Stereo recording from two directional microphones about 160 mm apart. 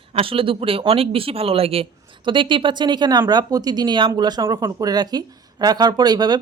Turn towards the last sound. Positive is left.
turn(degrees=-25)  # may be behind; listen again after turning